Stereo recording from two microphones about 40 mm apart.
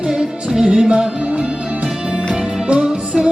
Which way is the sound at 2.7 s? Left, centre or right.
Right.